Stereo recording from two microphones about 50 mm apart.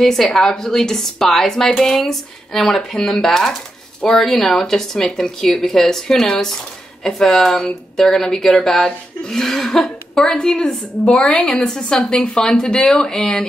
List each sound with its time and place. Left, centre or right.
0.0 s a woman's voice: centre